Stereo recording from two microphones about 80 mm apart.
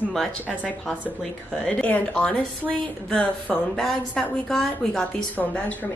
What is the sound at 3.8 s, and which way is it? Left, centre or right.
Speech, centre.